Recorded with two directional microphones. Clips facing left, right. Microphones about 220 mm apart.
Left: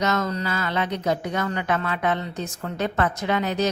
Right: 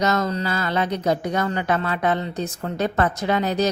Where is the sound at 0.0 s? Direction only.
35° right (ahead or behind).